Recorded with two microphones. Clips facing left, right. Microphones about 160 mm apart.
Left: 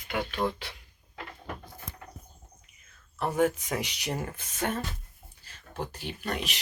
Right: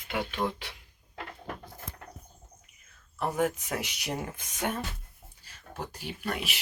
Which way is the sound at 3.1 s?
5° right (ahead or behind).